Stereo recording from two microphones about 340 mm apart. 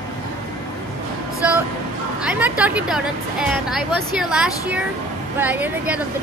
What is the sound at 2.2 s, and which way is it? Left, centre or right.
Speech, centre.